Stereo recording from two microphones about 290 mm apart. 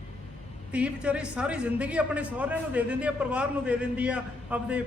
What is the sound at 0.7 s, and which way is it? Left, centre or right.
A woman's voice, centre.